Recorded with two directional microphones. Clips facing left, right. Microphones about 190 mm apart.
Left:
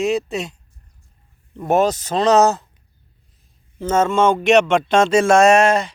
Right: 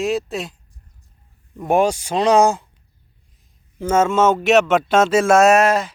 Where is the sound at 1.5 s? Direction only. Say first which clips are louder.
Even; 10° right (ahead or behind).